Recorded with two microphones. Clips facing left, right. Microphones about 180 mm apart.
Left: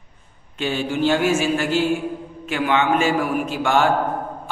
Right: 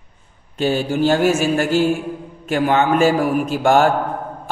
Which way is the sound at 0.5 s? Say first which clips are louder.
Right 4 dB; 40° right (ahead or behind).